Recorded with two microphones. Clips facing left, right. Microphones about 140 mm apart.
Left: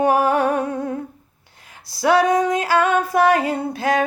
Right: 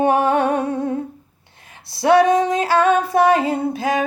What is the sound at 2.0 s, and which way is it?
Music, 25° right (ahead or behind).